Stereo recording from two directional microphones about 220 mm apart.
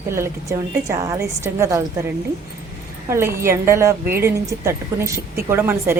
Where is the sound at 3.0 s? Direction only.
10° right (ahead or behind).